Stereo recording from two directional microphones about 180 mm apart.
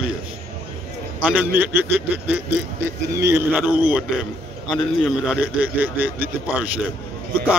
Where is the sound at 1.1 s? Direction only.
5° right (ahead or behind).